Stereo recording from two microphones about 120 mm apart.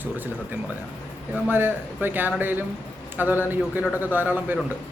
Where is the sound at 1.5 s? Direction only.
15° right (ahead or behind).